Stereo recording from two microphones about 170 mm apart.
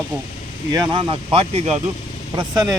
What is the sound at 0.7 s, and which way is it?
Speech, 30° right (ahead or behind).